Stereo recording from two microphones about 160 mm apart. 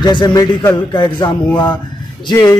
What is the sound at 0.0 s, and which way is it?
Speech, 25° left (ahead or behind).